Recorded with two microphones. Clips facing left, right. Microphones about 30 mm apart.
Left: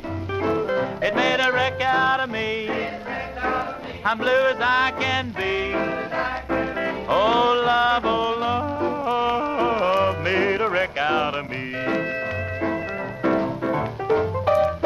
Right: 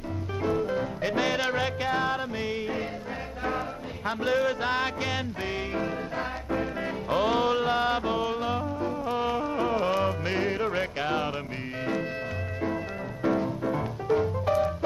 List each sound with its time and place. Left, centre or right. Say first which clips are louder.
0.4 s music: left 5 dB; left
3.4 s music: left 5 dB; left
13.2 s music: left 4 dB; left